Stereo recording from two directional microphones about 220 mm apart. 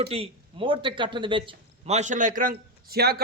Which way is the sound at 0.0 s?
25° right (ahead or behind).